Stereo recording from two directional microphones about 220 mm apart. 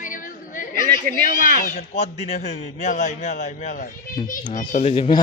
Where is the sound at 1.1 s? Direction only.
40° right (ahead or behind).